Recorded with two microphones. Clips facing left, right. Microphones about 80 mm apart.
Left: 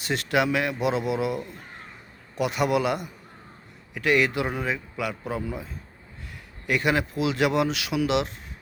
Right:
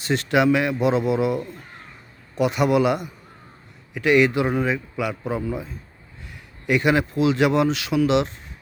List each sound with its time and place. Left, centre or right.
0.0 s a man's voice: centre